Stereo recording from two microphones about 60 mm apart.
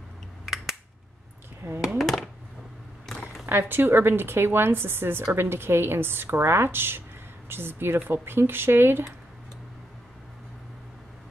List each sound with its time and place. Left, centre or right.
1.6 s speech: right
2.0 s a sound: centre
3.4 s speech: right